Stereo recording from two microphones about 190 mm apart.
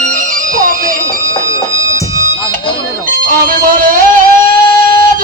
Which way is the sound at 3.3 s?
50° right (ahead or behind).